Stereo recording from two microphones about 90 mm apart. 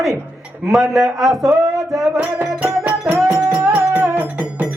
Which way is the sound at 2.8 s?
5° right (ahead or behind).